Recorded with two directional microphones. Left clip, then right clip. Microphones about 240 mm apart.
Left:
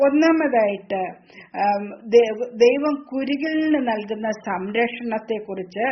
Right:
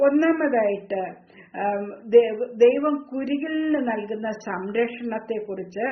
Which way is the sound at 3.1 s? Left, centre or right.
Left.